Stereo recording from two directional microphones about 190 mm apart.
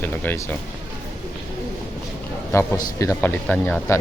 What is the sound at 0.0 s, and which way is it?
Speech, 10° left (ahead or behind).